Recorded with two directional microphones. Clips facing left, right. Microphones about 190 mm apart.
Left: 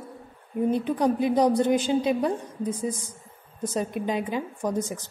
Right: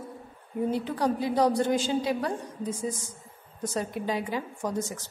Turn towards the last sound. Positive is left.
turn(degrees=15)  # may be behind; listen again after turning